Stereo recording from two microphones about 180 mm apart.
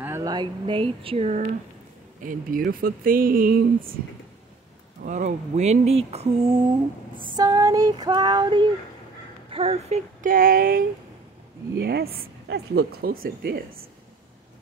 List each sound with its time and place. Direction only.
0.0 s speech: 15° right (ahead or behind); by 1.5 s 40° right (ahead or behind)
2.2 s speech: 50° right (ahead or behind)
5.0 s speech: 45° right (ahead or behind)
7.3 s female singing: 20° right (ahead or behind)
9.5 s speech: 35° right (ahead or behind)
10.3 s speech: 55° right (ahead or behind)
11.8 s a woman's voice: 65° right (ahead or behind)